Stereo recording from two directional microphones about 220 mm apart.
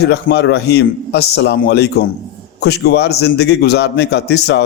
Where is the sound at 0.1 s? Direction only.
50° left (ahead or behind).